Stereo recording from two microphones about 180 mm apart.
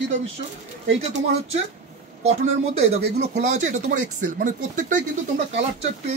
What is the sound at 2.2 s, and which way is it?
Speech, 35° right (ahead or behind).